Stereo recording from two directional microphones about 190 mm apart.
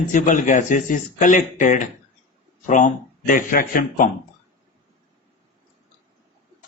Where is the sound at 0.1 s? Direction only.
40° left (ahead or behind).